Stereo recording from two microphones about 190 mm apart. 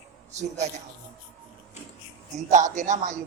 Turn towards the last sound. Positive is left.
turn(degrees=-40)  # may be behind; listen again after turning